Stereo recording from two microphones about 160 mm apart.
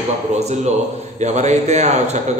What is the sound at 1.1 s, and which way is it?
A man's voice, 45° right (ahead or behind).